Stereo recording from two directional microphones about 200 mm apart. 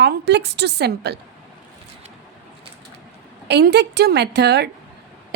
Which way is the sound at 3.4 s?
55° right (ahead or behind).